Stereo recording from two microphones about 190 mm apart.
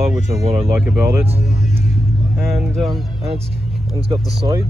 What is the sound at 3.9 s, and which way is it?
Speech, 25° right (ahead or behind).